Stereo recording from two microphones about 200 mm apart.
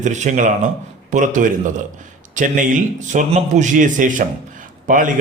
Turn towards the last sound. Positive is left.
turn(degrees=-40)  # may be behind; listen again after turning